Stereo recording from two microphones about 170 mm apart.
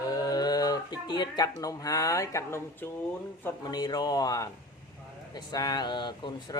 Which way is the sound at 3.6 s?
25° left (ahead or behind).